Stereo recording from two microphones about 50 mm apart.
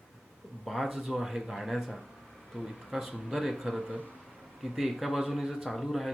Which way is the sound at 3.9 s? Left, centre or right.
Right.